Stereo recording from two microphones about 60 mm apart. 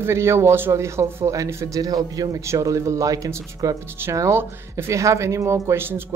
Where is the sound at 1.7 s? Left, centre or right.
Right.